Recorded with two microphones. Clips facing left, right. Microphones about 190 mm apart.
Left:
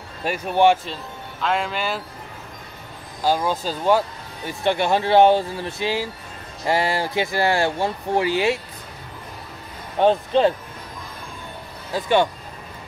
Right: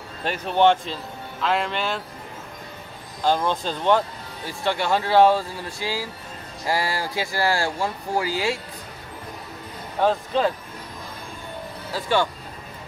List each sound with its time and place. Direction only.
0.2 s speech: 10° left (ahead or behind)
3.3 s speech: 5° left (ahead or behind)
4.5 s speech: 20° left (ahead or behind)
9.9 s speech: 25° left (ahead or behind)
11.9 s speech: 20° left (ahead or behind)